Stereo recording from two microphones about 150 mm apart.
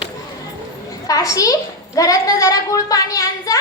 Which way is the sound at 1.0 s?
25° left (ahead or behind).